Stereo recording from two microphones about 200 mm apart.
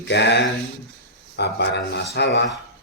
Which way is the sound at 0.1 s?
60° left (ahead or behind).